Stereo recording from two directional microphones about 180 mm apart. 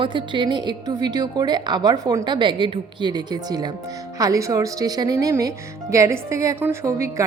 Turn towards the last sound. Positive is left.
turn(degrees=-15)  # may be behind; listen again after turning